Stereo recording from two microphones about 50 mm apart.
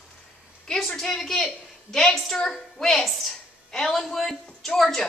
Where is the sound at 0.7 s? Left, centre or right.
Centre.